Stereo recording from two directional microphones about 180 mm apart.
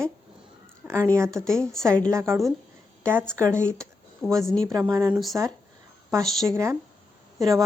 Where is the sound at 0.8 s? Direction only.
5° right (ahead or behind).